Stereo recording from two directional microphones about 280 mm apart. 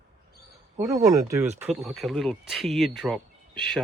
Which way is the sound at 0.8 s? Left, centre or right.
Centre.